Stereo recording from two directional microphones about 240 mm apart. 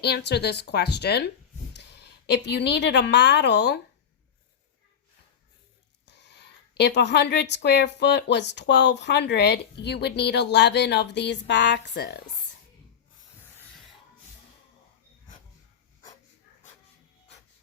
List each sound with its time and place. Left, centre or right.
0.0 s a woman's voice: left
6.1 s speech: left
13.4 s rub: centre